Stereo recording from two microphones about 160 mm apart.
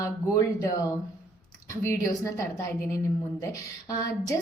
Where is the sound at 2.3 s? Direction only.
20° left (ahead or behind).